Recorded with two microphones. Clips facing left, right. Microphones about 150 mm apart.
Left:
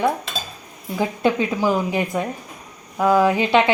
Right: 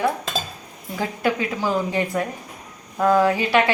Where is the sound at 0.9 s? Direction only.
20° left (ahead or behind).